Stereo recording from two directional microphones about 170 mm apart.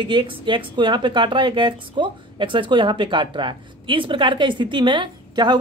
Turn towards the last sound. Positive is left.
turn(degrees=-25)  # may be behind; listen again after turning